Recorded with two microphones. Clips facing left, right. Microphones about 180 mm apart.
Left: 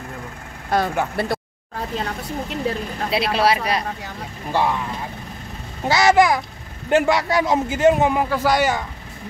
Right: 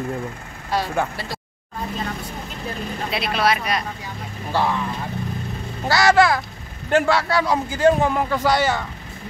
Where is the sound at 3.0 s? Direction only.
30° left (ahead or behind).